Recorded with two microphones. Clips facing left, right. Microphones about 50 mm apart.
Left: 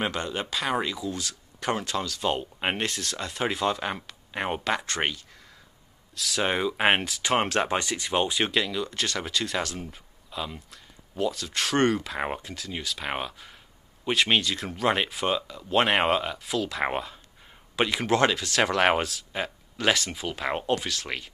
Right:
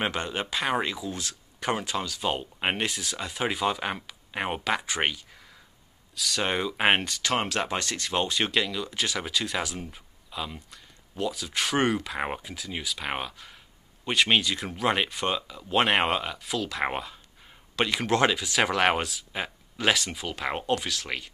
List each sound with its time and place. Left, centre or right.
0.0 s speech: right; by 7.2 s centre
7.2 s speech: centre
7.4 s speech: left
7.7 s speech: centre